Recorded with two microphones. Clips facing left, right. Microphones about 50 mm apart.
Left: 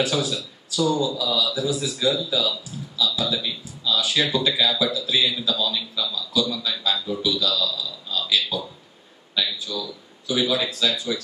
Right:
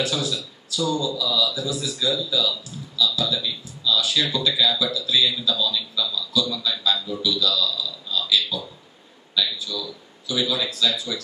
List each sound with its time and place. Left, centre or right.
0.0 s speech: centre
9.3 s speech: left